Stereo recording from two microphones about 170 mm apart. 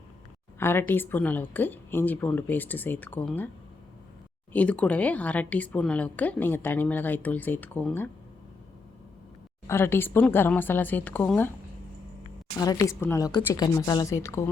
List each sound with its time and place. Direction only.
0.6 s a woman's voice: 15° left (ahead or behind)
4.5 s a woman's voice: 10° left (ahead or behind)
9.6 s a woman's voice: 15° left (ahead or behind)
12.5 s speech: 20° left (ahead or behind)